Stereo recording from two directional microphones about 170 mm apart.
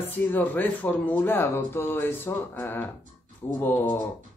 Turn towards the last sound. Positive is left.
turn(degrees=10)  # may be behind; listen again after turning